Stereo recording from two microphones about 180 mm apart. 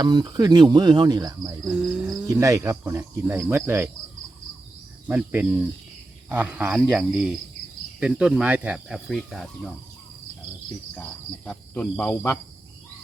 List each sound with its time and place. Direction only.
0.0 s speech: 25° right (ahead or behind)
1.6 s cricket: 5° right (ahead or behind)
2.2 s cricket: 15° right (ahead or behind)
5.0 s cricket: 10° right (ahead or behind)
6.2 s speech: 10° right (ahead or behind)
10.9 s cricket: 5° left (ahead or behind)